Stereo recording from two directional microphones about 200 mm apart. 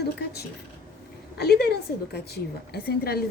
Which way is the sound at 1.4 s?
55° left (ahead or behind).